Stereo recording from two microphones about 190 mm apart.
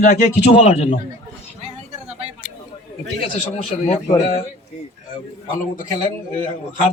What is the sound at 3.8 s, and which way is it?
Speech, 35° left (ahead or behind).